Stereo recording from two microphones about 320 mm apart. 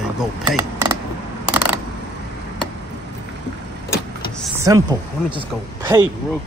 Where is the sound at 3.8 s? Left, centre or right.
Centre.